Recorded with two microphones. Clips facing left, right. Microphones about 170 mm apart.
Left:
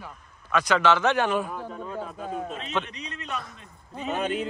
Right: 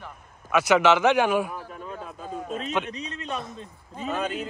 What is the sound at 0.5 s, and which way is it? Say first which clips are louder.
A man's voice: right 3 dB; 10° right (ahead or behind).